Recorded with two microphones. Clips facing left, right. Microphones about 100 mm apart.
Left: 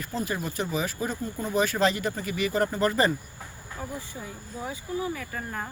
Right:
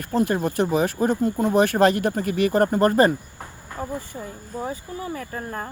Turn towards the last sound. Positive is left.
turn(degrees=-40)  # may be behind; listen again after turning